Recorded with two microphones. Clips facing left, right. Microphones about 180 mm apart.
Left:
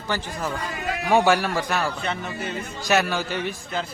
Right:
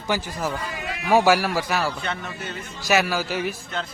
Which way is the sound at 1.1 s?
5° right (ahead or behind).